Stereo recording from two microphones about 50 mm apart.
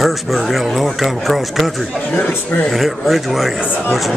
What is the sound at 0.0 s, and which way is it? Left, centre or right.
Speech, centre.